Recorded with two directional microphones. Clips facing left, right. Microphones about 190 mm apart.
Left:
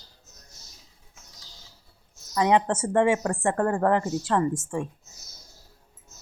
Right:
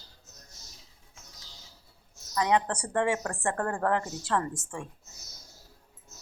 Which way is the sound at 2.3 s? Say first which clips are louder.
Left 5 dB; 25° left (ahead or behind).